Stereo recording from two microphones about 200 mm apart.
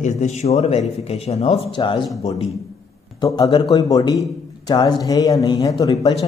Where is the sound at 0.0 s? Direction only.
35° left (ahead or behind).